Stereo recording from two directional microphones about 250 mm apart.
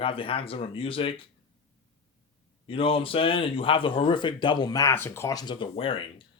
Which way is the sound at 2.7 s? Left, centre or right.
Left.